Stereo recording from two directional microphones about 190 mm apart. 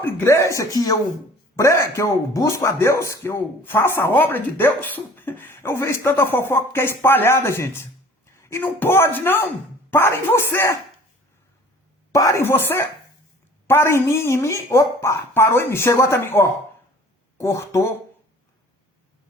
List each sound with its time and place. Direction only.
0.0 s speech: 15° left (ahead or behind)
12.1 s speech: 15° left (ahead or behind)